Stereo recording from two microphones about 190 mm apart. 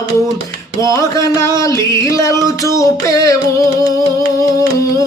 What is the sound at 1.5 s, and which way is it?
Music, 15° left (ahead or behind).